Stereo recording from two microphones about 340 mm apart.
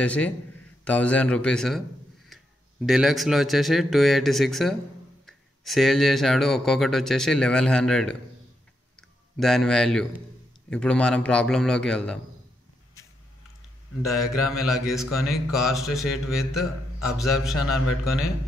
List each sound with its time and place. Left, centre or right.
0.0 s speech: centre
9.4 s speech: centre
14.0 s speech: centre